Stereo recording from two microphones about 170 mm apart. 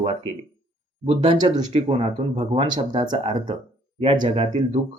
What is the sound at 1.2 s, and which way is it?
Speech, 30° right (ahead or behind).